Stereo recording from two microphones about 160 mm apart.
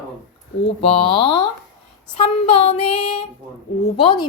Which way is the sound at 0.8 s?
35° left (ahead or behind).